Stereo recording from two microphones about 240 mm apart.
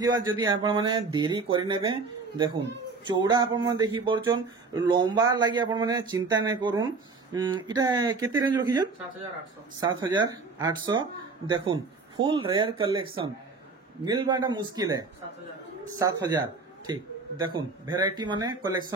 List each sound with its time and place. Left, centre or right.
0.0 s speech: centre